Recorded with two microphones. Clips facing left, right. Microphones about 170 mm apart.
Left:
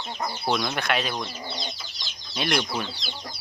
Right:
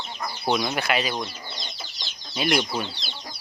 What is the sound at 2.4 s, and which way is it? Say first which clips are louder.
Speech: right 2 dB; 5° right (ahead or behind).